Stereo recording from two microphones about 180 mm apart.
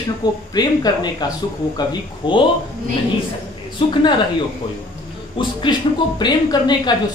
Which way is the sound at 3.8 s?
30° left (ahead or behind).